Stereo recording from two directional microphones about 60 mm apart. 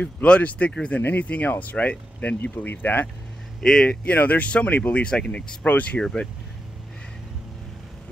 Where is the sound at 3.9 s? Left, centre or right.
Left.